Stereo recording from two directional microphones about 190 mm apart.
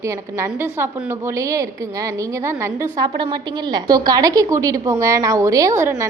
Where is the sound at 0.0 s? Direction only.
15° right (ahead or behind).